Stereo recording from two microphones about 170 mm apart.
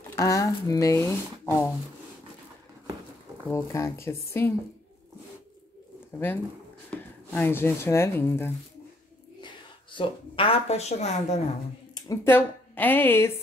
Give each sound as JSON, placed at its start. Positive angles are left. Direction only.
{"t": 0.1, "sound": "speech", "side_deg": 20}
{"t": 3.5, "sound": "speech", "side_deg": 15}
{"t": 6.1, "sound": "speech", "side_deg": 10}
{"t": 9.4, "sound": "a woman's voice", "side_deg": 30}
{"t": 11.9, "sound": "speech", "side_deg": 15}